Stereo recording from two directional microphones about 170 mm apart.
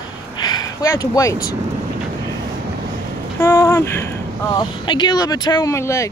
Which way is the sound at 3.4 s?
15° left (ahead or behind).